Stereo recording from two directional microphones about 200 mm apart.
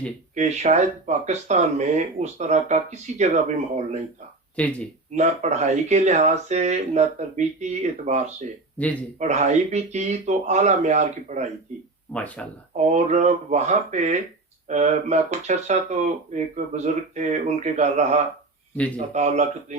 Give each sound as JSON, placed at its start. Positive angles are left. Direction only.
{"t": 0.3, "sound": "speech", "side_deg": -35}
{"t": 4.5, "sound": "speech", "side_deg": 5}
{"t": 5.1, "sound": "speech", "side_deg": -35}
{"t": 12.1, "sound": "speech", "side_deg": 5}
{"t": 12.7, "sound": "speech", "side_deg": -35}